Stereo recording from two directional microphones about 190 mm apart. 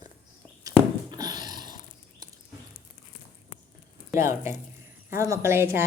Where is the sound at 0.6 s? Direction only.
20° right (ahead or behind).